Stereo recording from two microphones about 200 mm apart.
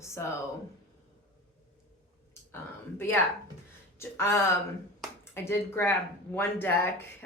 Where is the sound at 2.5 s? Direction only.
10° left (ahead or behind).